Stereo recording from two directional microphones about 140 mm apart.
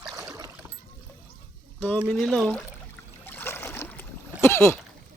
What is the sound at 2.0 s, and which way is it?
Speech, 5° left (ahead or behind).